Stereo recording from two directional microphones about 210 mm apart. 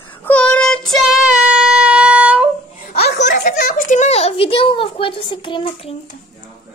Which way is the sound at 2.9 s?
45° left (ahead or behind).